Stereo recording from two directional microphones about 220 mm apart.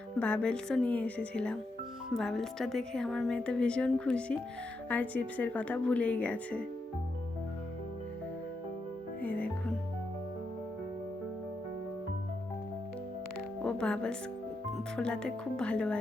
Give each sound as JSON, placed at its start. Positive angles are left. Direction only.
{"t": 0.2, "sound": "a woman's voice", "side_deg": 5}
{"t": 9.2, "sound": "music", "side_deg": 5}
{"t": 13.7, "sound": "music", "side_deg": 5}
{"t": 14.9, "sound": "a woman's voice", "side_deg": 5}